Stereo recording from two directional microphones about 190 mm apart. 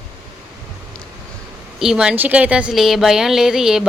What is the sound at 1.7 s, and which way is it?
A woman's voice, 5° right (ahead or behind).